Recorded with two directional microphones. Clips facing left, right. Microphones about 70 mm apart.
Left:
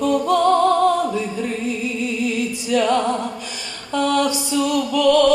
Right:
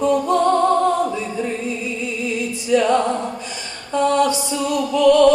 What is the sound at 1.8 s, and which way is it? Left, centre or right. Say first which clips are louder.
Music: left 2 dB; right.